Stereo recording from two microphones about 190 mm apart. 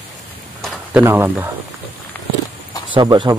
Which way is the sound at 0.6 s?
Centre (ahead or behind).